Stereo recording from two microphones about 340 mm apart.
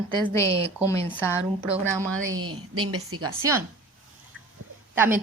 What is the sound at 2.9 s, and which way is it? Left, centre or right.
Speech, right.